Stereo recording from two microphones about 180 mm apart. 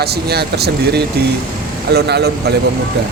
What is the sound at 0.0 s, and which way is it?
A woman's voice, 65° right (ahead or behind).